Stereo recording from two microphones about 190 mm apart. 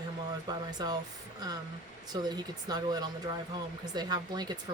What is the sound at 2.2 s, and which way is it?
A woman's voice, 20° right (ahead or behind).